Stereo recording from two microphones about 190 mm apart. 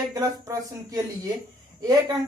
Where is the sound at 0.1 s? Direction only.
20° right (ahead or behind).